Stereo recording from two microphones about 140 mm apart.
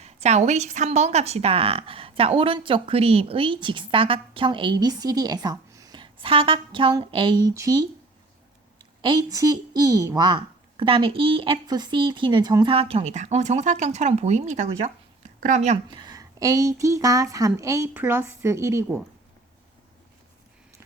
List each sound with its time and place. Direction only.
0.0 s a woman's voice: 50° right (ahead or behind); by 7.5 s 35° right (ahead or behind)
7.5 s speech: 20° right (ahead or behind)
9.0 s a woman's voice: 35° right (ahead or behind)
12.6 s speech: 45° right (ahead or behind)
15.9 s speech: 30° right (ahead or behind)